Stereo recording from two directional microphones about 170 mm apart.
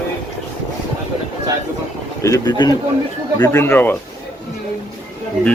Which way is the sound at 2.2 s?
20° left (ahead or behind).